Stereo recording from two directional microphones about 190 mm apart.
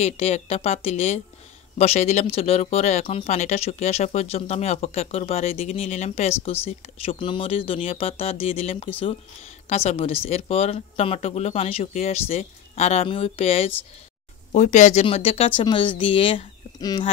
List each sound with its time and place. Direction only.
0.0 s speech: 35° left (ahead or behind)